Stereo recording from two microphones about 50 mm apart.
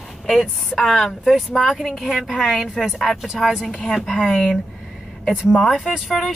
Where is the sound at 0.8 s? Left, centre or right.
Centre.